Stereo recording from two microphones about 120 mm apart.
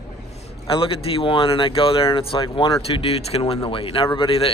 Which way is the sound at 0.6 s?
50° left (ahead or behind).